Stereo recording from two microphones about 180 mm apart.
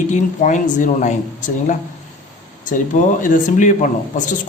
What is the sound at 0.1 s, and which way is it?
Speech, 45° left (ahead or behind).